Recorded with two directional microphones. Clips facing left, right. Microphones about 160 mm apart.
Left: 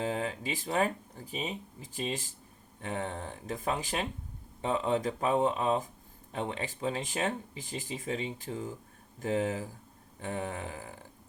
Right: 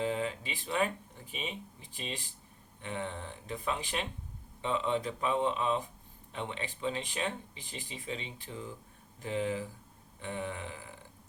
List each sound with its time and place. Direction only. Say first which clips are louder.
0.0 s speech: even; 45° left (ahead or behind)